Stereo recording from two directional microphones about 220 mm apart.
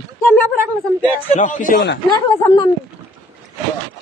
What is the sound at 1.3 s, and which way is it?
Speech, 35° left (ahead or behind).